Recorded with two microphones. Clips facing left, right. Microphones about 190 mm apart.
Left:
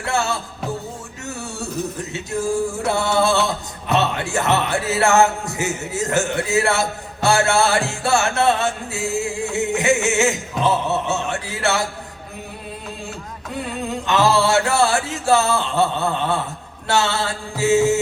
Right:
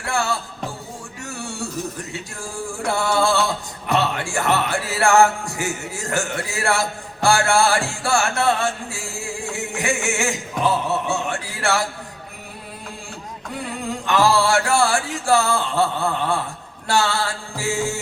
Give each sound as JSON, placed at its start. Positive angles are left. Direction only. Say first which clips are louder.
{"t": 0.0, "sound": "music", "louder": "left 1 dB", "side_deg": 20}
{"t": 2.8, "sound": "music", "louder": "right 1 dB", "side_deg": 20}
{"t": 14.1, "sound": "music", "louder": "left 1 dB", "side_deg": 20}